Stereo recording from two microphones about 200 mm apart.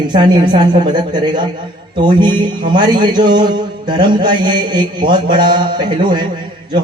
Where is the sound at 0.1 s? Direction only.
20° right (ahead or behind).